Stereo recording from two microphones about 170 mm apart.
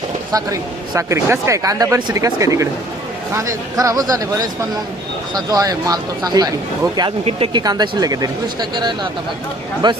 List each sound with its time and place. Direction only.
0.3 s speech: 20° right (ahead or behind)
7.3 s speech: 35° right (ahead or behind)